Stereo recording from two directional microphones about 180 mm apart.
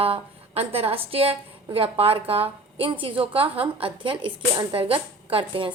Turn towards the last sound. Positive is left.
turn(degrees=-30)  # may be behind; listen again after turning